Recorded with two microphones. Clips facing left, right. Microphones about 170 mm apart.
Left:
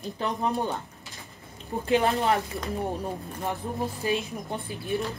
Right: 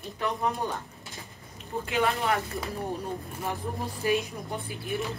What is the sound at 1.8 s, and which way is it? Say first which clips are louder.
Speech: left 4 dB; 35° left (ahead or behind).